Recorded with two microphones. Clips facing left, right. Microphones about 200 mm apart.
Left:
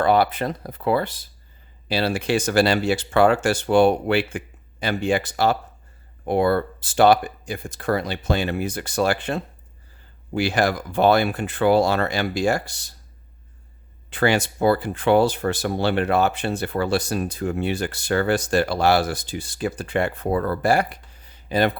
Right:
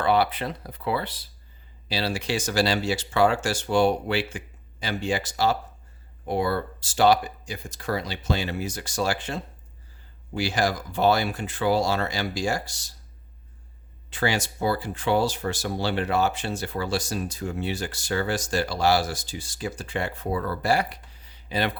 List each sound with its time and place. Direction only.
0.0 s speech: 45° left (ahead or behind)
14.1 s speech: 60° left (ahead or behind)